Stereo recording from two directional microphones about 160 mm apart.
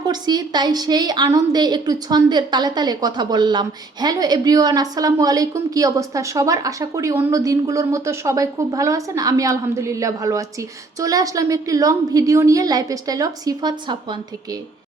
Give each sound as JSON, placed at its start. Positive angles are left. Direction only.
{"t": 0.0, "sound": "a woman's voice", "side_deg": -25}